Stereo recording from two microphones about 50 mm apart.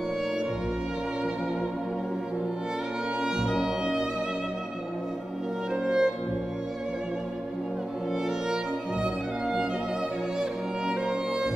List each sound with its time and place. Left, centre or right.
3.2 s music: centre
5.9 s music: centre
9.0 s music: centre
10.9 s music: centre